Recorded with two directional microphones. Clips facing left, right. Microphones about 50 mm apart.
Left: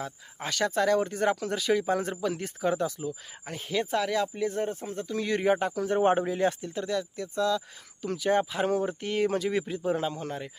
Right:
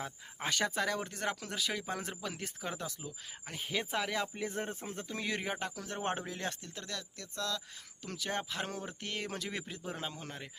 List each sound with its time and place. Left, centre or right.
0.0 s speech: centre
3.6 s speech: centre
5.4 s speech: centre